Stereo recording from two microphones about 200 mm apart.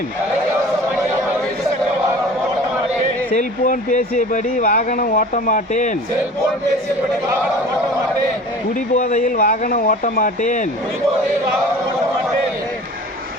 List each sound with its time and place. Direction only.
3.3 s speech: 40° left (ahead or behind)
9.0 s speech: 40° left (ahead or behind)